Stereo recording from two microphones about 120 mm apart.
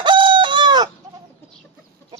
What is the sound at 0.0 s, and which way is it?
Chicken, 40° right (ahead or behind).